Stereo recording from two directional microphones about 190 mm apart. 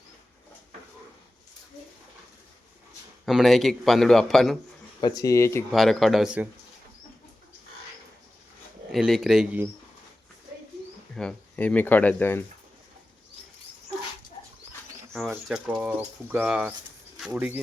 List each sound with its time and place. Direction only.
3.2 s speech: centre (ahead or behind)
4.9 s speech: 20° left (ahead or behind)
5.7 s speech: centre (ahead or behind)
8.9 s speech: centre (ahead or behind)
11.1 s speech: 5° left (ahead or behind)
15.1 s speech: centre (ahead or behind)